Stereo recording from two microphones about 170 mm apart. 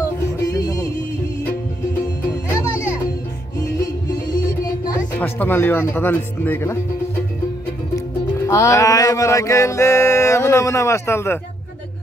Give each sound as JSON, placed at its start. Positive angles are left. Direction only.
{"t": 0.4, "sound": "music", "side_deg": 20}
{"t": 2.5, "sound": "music", "side_deg": 15}
{"t": 5.2, "sound": "music", "side_deg": 10}
{"t": 7.9, "sound": "music", "side_deg": 15}